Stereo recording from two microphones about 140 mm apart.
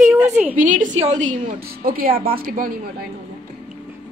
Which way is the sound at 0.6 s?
65° right (ahead or behind).